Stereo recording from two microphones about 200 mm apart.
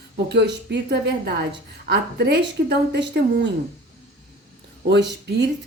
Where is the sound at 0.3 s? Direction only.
60° right (ahead or behind).